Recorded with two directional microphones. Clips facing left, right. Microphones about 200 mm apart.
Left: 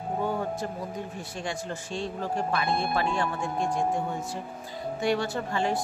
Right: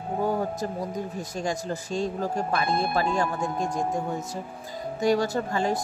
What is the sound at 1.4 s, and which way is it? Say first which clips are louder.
Speech: right 4 dB; 40° right (ahead or behind).